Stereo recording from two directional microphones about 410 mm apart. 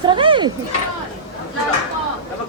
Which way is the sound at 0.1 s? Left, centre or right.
Centre.